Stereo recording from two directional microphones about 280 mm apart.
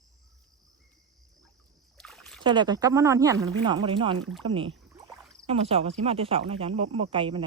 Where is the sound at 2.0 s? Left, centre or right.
Centre.